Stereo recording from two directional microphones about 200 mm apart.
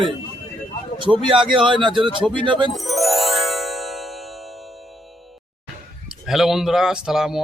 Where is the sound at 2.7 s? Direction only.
Centre (ahead or behind).